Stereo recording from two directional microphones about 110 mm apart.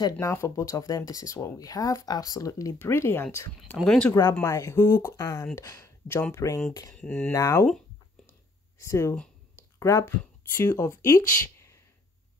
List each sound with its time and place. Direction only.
0.2 s speech: 25° left (ahead or behind)
3.8 s speech: 5° left (ahead or behind)
4.1 s speech: 40° left (ahead or behind)
7.0 s speech: 10° left (ahead or behind)
7.3 s speech: 25° left (ahead or behind)
8.7 s speech: 25° left (ahead or behind)
9.6 s a sound: 25° left (ahead or behind)
10.6 s speech: 25° left (ahead or behind)